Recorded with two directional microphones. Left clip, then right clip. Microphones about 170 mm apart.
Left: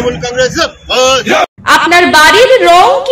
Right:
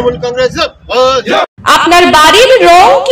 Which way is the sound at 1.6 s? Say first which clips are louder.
Right 2 dB; 10° right (ahead or behind).